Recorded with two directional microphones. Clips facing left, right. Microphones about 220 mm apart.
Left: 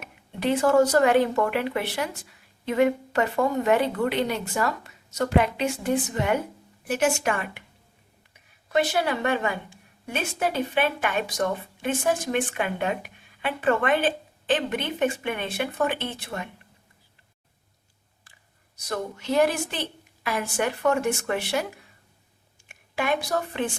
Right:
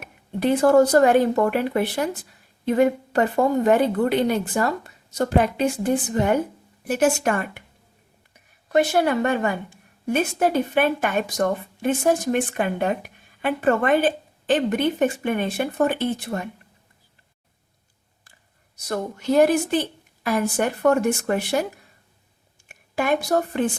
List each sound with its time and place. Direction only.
0.4 s a woman's voice: 40° right (ahead or behind)
5.4 s a woman's voice: 45° right (ahead or behind)
8.7 s a woman's voice: 45° right (ahead or behind)
18.9 s a woman's voice: 45° right (ahead or behind)
22.7 s speech: 45° right (ahead or behind)